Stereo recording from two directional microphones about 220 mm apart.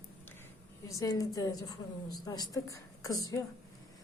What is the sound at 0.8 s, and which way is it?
A woman's voice, 15° left (ahead or behind).